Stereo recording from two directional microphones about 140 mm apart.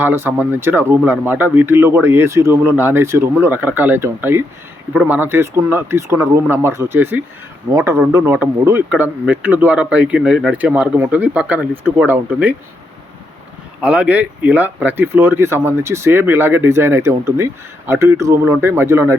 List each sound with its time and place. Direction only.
0.0 s speech: 15° right (ahead or behind)
13.8 s speech: 10° right (ahead or behind)